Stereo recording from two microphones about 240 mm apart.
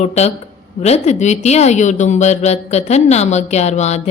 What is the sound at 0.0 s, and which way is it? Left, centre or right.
Speech, left.